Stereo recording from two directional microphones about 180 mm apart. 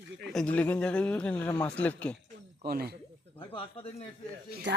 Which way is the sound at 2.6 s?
60° right (ahead or behind).